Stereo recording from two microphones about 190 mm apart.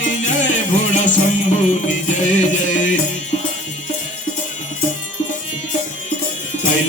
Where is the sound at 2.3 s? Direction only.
40° left (ahead or behind).